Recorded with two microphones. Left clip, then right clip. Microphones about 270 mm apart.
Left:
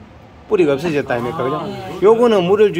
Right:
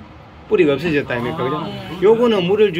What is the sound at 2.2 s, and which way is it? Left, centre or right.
Speech, centre.